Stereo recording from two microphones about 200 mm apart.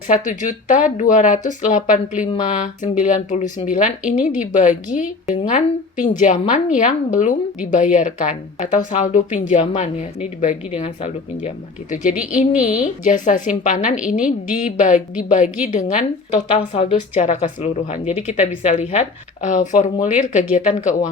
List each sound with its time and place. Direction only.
0.1 s speech: 40° left (ahead or behind)
16.3 s speech: 30° left (ahead or behind)